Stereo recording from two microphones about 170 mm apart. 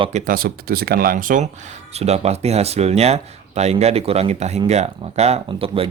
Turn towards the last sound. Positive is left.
turn(degrees=-35)  # may be behind; listen again after turning